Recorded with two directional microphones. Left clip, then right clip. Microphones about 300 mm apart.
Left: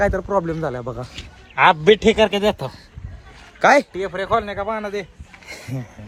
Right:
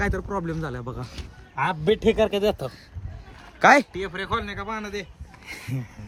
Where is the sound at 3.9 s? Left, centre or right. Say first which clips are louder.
Left 7 dB; centre.